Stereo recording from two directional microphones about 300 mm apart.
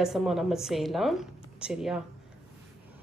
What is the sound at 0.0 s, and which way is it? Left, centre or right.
A woman's voice, centre.